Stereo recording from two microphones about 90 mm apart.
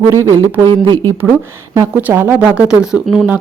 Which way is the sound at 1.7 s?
30° right (ahead or behind).